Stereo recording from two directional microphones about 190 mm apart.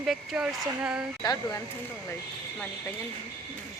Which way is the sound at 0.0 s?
Centre (ahead or behind).